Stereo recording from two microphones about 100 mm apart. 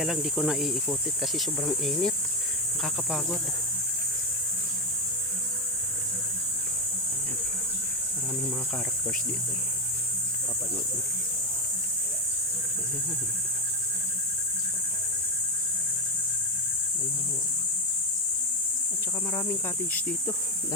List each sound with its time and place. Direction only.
0.0 s speech: centre (ahead or behind)
19.3 s cricket: 30° left (ahead or behind)